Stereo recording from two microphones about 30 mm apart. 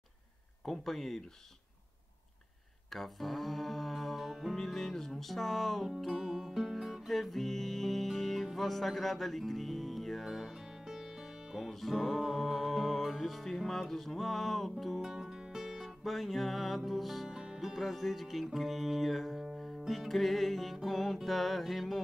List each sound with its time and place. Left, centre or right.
0.7 s speech: centre
2.9 s music: centre
4.6 s music: centre
7.1 s music: centre
11.5 s music: centre
15.2 s music: right
15.6 s music: centre
16.0 s music: centre